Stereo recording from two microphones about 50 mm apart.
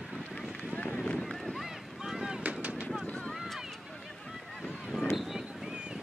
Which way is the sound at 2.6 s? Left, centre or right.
Right.